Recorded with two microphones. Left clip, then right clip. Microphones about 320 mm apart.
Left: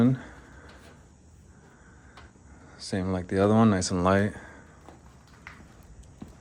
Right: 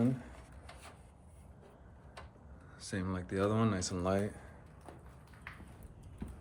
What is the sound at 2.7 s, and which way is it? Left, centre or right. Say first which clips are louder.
Speech: left 10 dB; centre.